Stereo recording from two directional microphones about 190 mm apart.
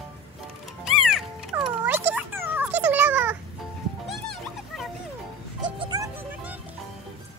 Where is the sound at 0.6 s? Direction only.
Centre (ahead or behind).